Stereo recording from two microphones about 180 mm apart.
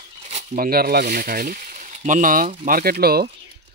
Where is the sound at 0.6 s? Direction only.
60° right (ahead or behind).